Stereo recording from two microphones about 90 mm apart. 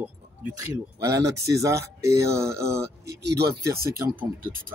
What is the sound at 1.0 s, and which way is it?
Speech, 35° right (ahead or behind).